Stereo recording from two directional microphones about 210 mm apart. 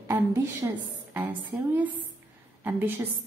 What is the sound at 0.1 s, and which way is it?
A woman's voice, 15° right (ahead or behind).